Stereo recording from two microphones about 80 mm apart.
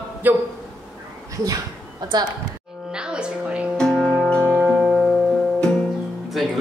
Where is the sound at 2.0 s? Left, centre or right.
Right.